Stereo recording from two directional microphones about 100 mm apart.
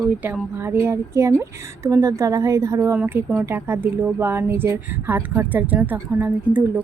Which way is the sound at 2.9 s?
20° right (ahead or behind).